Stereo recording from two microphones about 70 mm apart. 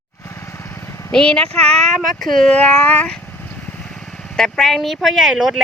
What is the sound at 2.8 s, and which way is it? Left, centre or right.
Speech, left.